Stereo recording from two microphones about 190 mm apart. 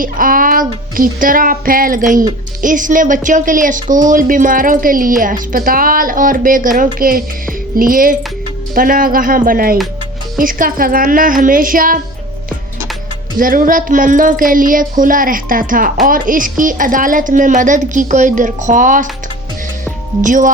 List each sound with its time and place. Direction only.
0.0 s a woman's voice: 45° right (ahead or behind)
13.4 s a woman's voice: 45° right (ahead or behind)
20.2 s a woman's voice: 45° right (ahead or behind)